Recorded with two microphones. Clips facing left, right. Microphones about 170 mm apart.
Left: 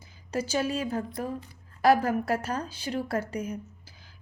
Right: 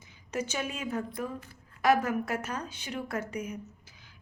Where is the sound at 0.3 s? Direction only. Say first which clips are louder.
Left 5 dB; 30° left (ahead or behind).